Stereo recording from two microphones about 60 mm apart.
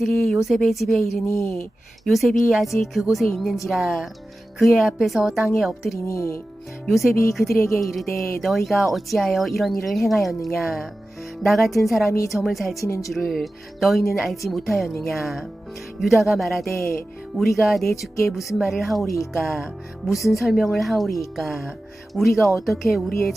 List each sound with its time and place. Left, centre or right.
0.0 s speech: centre
1.2 s speech: left
2.0 s speech: centre
6.1 s speech: left
6.8 s speech: centre
12.8 s speech: left
13.1 s speech: centre